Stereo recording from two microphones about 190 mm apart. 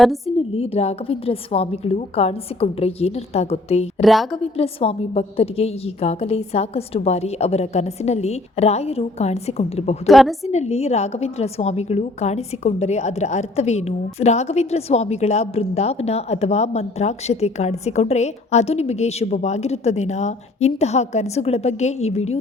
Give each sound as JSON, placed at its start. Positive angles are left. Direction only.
{"t": 0.5, "sound": "a woman's voice", "side_deg": 30}
{"t": 4.0, "sound": "a woman's voice", "side_deg": 0}
{"t": 4.5, "sound": "a woman's voice", "side_deg": 30}
{"t": 10.1, "sound": "a woman's voice", "side_deg": 0}
{"t": 10.4, "sound": "a woman's voice", "side_deg": 35}